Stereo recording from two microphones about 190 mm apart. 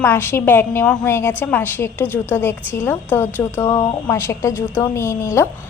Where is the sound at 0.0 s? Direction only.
10° left (ahead or behind).